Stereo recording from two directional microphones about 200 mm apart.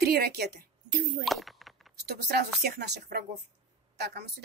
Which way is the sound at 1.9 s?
55° right (ahead or behind).